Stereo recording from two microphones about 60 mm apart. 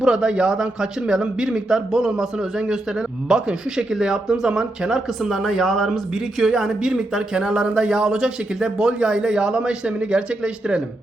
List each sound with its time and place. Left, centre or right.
0.0 s speech: centre